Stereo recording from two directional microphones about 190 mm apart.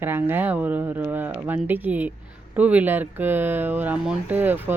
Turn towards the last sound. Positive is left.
turn(degrees=-10)  # may be behind; listen again after turning